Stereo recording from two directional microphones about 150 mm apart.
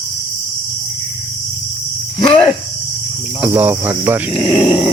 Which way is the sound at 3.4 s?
10° right (ahead or behind).